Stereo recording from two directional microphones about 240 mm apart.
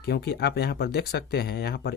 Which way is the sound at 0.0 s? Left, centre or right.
Left.